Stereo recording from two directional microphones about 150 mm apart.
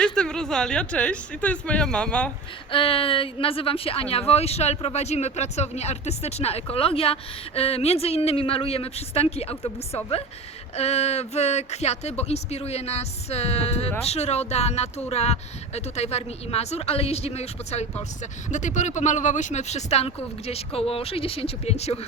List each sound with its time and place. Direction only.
0.0 s speech: 5° left (ahead or behind)
2.7 s speech: 35° left (ahead or behind)